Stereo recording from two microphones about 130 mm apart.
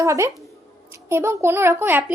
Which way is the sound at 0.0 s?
25° right (ahead or behind).